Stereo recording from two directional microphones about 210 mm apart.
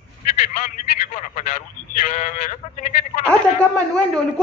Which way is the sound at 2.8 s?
40° left (ahead or behind).